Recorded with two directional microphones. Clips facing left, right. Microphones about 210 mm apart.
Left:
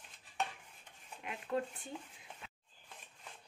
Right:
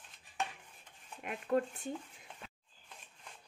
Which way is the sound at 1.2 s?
50° right (ahead or behind).